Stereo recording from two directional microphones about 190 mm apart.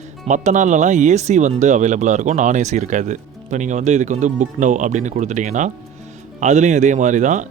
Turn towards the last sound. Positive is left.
turn(degrees=-40)  # may be behind; listen again after turning